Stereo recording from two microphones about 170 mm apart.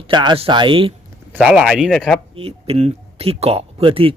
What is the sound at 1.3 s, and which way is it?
Speech, centre (ahead or behind).